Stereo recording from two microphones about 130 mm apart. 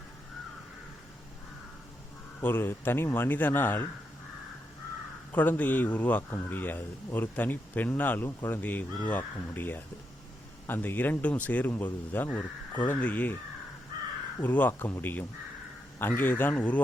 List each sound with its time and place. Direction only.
2.4 s speech: 15° left (ahead or behind)
5.3 s speech: 15° left (ahead or behind)
14.4 s speech: 15° left (ahead or behind)